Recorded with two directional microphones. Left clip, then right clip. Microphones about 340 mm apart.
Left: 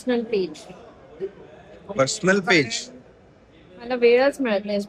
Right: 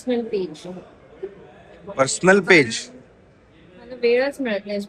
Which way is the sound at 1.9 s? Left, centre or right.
Centre.